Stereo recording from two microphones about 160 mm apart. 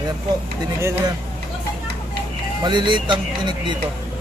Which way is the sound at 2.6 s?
30° right (ahead or behind).